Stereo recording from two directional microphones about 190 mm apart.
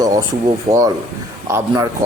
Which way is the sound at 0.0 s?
20° right (ahead or behind).